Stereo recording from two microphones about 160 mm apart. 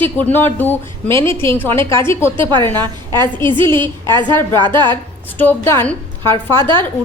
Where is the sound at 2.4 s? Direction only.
30° right (ahead or behind).